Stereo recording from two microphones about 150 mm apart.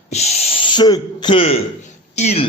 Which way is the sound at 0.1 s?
45° left (ahead or behind).